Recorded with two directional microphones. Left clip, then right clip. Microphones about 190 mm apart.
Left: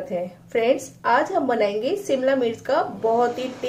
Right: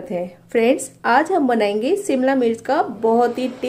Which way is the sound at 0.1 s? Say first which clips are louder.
Right 5 dB; 40° right (ahead or behind).